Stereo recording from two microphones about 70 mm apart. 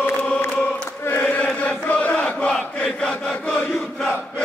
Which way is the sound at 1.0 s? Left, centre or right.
Left.